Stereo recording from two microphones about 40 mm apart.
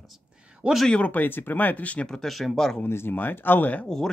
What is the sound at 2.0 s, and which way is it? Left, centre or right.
Speech, centre.